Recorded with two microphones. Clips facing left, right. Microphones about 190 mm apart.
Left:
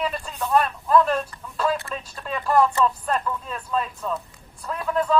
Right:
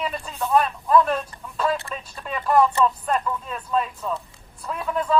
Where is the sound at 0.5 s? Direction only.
Centre (ahead or behind).